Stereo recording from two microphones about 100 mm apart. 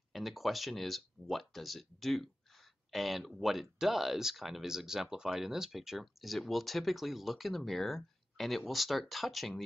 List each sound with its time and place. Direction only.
0.1 s speech: centre (ahead or behind)